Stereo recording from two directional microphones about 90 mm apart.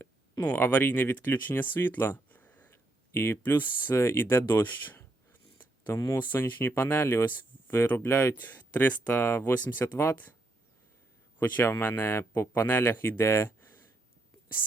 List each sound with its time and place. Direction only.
0.4 s speech: 20° left (ahead or behind)
2.7 s a sound: 30° left (ahead or behind)
6.1 s speech: 25° left (ahead or behind)
11.3 s speech: 20° left (ahead or behind)